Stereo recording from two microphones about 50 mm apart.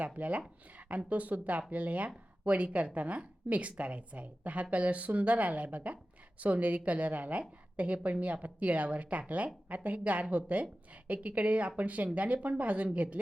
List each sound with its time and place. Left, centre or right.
0.0 s a woman's voice: right